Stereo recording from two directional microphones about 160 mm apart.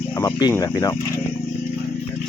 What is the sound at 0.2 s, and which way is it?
Speech, 25° left (ahead or behind).